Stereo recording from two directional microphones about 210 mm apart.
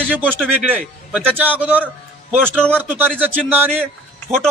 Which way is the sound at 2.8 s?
10° right (ahead or behind).